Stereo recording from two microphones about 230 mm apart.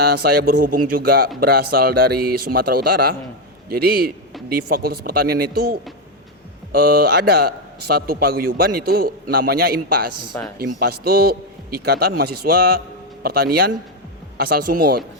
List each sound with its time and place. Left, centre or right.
0.1 s a man's voice: right
3.7 s a man's voice: right
6.7 s a man's voice: right